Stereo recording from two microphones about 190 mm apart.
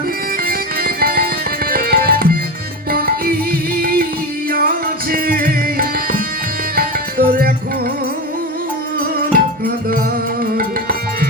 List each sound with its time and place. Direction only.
0.4 s music: 50° right (ahead or behind)
9.1 s music: 50° right (ahead or behind)